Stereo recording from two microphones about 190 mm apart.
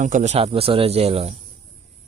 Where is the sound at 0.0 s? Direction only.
40° right (ahead or behind).